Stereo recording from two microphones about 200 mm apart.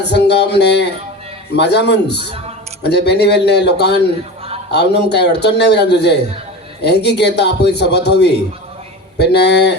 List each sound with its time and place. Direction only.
0.0 s a man's voice: 55° left (ahead or behind)